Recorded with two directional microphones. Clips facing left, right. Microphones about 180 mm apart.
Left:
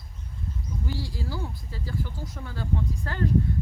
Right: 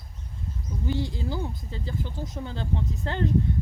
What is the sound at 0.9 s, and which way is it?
Speech, 20° right (ahead or behind).